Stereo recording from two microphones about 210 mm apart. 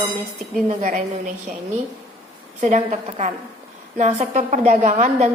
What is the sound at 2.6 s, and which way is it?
A woman's voice, 35° right (ahead or behind).